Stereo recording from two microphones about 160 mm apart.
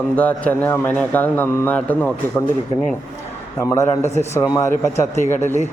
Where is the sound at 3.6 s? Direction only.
20° left (ahead or behind).